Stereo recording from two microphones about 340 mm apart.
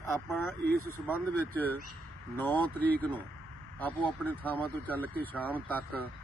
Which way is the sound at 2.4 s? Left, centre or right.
Centre.